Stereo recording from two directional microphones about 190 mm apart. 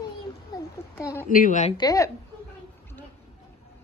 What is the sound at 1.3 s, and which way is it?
Speech, 45° left (ahead or behind).